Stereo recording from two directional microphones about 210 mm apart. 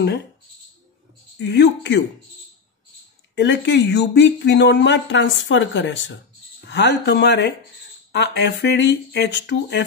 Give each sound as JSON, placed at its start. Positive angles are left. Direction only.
{"t": 1.4, "sound": "speech", "side_deg": 55}
{"t": 3.3, "sound": "speech", "side_deg": 55}